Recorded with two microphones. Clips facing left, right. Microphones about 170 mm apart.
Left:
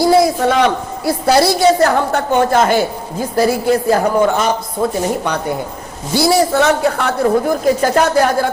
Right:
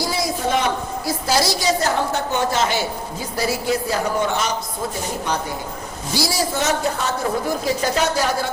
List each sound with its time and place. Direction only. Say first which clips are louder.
0.0 s a man's voice: left 11 dB; 60° left (ahead or behind)